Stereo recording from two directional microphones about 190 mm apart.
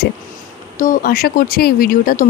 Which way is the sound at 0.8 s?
50° left (ahead or behind).